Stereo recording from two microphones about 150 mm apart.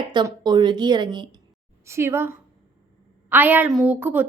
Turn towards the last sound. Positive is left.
turn(degrees=-10)  # may be behind; listen again after turning